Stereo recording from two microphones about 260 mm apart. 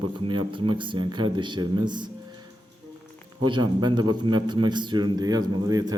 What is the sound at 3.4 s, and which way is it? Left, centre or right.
A man's voice, centre.